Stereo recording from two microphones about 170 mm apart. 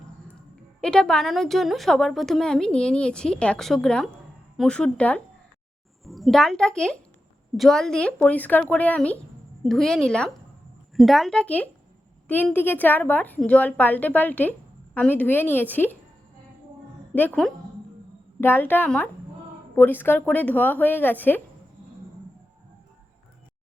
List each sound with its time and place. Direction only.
0.8 s a woman's voice: 5° left (ahead or behind)
17.2 s a woman's voice: 5° left (ahead or behind)